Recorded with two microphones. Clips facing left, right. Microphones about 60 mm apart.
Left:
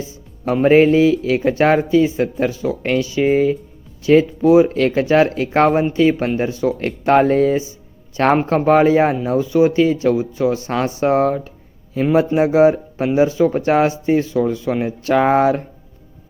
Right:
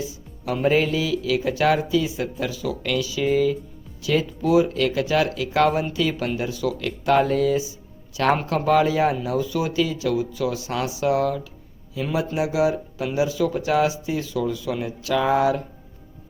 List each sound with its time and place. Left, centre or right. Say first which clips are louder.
0.0 s speech: left 5 dB; left